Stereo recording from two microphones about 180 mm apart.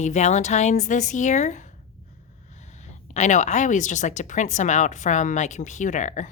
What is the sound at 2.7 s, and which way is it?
A woman's voice, 40° left (ahead or behind).